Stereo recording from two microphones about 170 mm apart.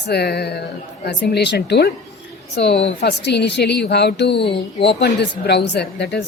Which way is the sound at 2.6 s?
90° left.